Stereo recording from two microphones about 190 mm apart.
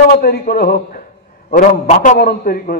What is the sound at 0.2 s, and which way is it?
A man's voice, 55° left (ahead or behind).